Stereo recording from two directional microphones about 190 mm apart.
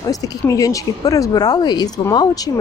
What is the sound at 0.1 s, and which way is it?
Speech, 20° left (ahead or behind).